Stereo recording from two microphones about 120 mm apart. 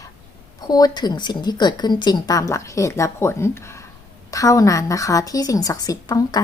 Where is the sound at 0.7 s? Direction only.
35° left (ahead or behind).